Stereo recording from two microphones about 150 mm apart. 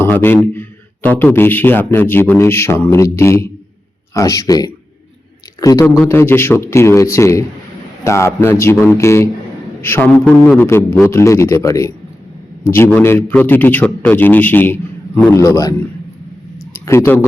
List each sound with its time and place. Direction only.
0.0 s a man's voice: 15° left (ahead or behind)
13.0 s a man's voice: 15° left (ahead or behind)
16.7 s a sound: 20° left (ahead or behind)